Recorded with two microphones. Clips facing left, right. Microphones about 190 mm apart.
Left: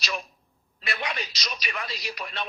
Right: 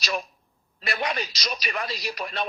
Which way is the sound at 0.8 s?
40° right (ahead or behind).